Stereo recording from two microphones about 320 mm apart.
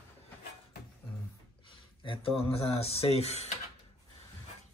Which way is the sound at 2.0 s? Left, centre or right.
Centre.